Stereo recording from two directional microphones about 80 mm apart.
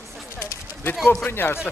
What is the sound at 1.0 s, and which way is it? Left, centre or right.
Speech, centre.